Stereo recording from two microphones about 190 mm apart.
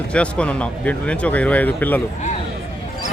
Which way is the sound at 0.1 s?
5° left (ahead or behind).